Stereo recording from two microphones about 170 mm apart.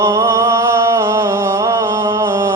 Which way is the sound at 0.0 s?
15° right (ahead or behind).